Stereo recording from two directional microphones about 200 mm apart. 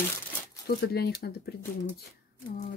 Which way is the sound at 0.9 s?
55° left (ahead or behind).